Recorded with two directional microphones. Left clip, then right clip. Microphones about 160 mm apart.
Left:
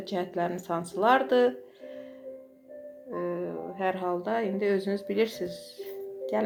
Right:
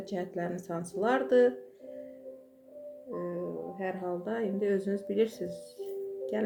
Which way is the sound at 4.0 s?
25° right (ahead or behind).